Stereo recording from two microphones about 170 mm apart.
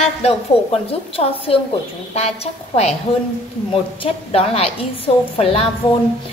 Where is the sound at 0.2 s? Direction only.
35° left (ahead or behind).